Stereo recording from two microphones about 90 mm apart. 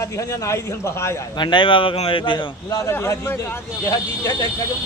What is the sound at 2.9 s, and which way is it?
A man's voice, 30° left (ahead or behind).